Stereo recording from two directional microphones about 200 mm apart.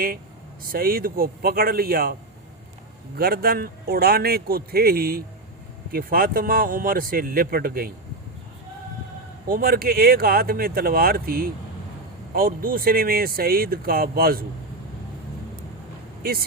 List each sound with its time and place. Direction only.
0.7 s speech: 45° right (ahead or behind)
3.2 s speech: 50° right (ahead or behind)
9.5 s speech: 50° right (ahead or behind)